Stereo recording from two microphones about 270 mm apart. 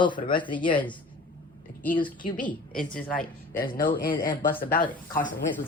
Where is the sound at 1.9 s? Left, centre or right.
Centre.